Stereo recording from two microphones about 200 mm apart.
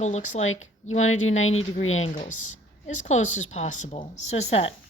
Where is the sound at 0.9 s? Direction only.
35° left (ahead or behind).